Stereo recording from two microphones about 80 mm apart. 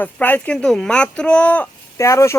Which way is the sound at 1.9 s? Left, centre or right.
Left.